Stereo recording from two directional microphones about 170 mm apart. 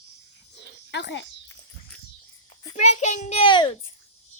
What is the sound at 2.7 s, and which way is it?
A child's voice, 45° left (ahead or behind).